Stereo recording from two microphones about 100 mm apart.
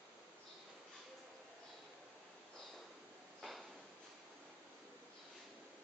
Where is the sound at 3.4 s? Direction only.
Centre (ahead or behind).